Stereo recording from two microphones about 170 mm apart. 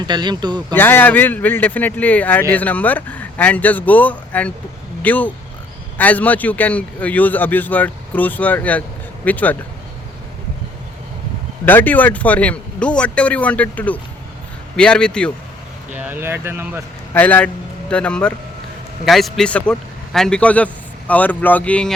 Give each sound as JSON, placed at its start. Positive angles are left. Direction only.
{"t": 0.0, "sound": "speech", "side_deg": -25}
{"t": 0.7, "sound": "speech", "side_deg": 10}
{"t": 11.6, "sound": "a man's voice", "side_deg": 10}
{"t": 16.0, "sound": "speech", "side_deg": -10}
{"t": 17.2, "sound": "a man's voice", "side_deg": 10}